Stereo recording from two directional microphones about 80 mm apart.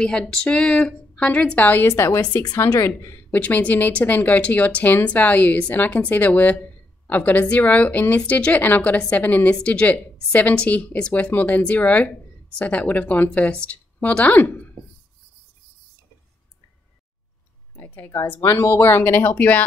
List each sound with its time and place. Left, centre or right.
0.0 s a woman's voice: centre; by 2.0 s left
2.3 s speech: left
3.3 s a woman's voice: centre
17.7 s a sound: left
18.6 s speech: left